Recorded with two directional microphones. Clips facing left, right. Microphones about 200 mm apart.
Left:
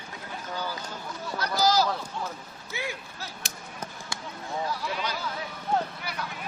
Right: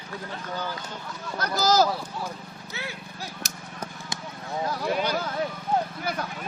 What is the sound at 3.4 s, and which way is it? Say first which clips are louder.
Basketball bounce: right 1 dB; 45° right (ahead or behind).